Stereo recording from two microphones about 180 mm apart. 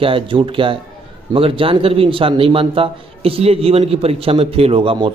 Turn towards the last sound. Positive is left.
turn(degrees=-30)  # may be behind; listen again after turning